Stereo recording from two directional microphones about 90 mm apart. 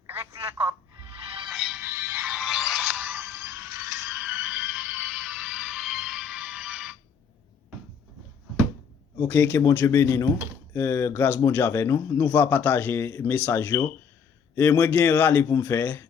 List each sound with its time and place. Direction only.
0.1 s telephone: 30° right (ahead or behind)
1.5 s music: 5° right (ahead or behind)
1.8 s music: 25° right (ahead or behind)
2.4 s music: 5° right (ahead or behind)
2.9 s music: 15° right (ahead or behind)
4.3 s music: 20° right (ahead or behind)
5.6 s music: 5° right (ahead or behind)
9.1 s speech: 20° left (ahead or behind)
12.2 s speech: 20° left (ahead or behind)